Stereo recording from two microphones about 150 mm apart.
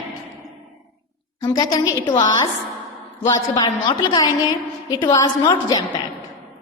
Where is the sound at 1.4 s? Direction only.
25° left (ahead or behind).